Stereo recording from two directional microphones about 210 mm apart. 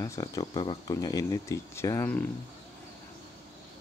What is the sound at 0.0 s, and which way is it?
Speech, 15° left (ahead or behind).